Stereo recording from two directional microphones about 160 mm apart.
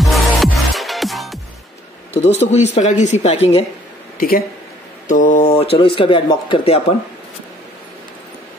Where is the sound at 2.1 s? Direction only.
40° left (ahead or behind).